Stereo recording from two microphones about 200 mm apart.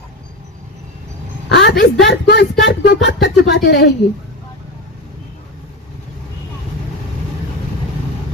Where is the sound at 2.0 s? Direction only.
55° left (ahead or behind).